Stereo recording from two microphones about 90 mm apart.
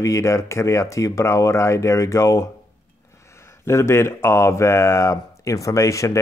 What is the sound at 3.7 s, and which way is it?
Speech, 30° left (ahead or behind).